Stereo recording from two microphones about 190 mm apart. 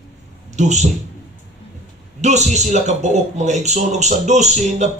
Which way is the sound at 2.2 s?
35° right (ahead or behind).